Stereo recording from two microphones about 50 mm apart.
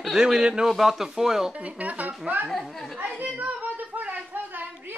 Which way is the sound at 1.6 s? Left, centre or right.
Right.